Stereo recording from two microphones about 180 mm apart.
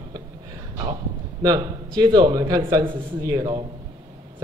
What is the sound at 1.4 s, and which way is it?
Speech, 25° right (ahead or behind).